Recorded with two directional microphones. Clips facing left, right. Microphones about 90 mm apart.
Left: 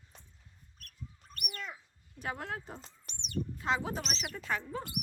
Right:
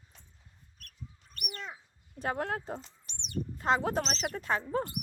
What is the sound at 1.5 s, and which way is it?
Speech, 25° right (ahead or behind).